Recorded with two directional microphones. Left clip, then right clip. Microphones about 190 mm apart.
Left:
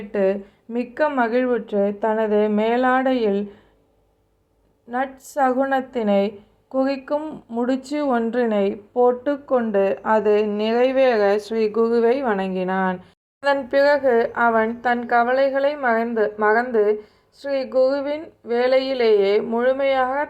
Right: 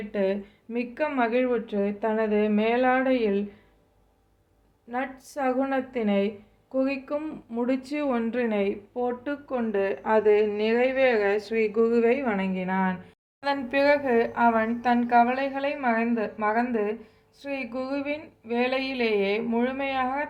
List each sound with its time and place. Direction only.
0.1 s a woman's voice: 15° left (ahead or behind)
4.9 s a woman's voice: 20° left (ahead or behind)